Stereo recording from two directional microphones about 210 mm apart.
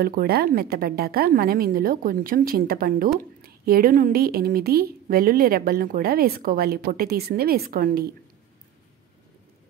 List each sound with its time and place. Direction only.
0.0 s a woman's voice: 45° right (ahead or behind)